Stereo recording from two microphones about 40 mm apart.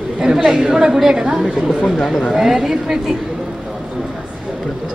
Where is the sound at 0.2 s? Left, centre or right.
Centre.